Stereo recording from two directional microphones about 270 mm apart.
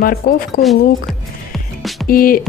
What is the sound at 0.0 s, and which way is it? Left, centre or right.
Speech, left.